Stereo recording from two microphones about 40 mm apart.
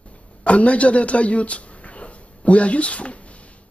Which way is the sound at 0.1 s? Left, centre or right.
Left.